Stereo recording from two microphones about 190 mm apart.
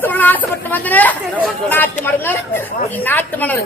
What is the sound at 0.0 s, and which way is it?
Speech, 10° left (ahead or behind).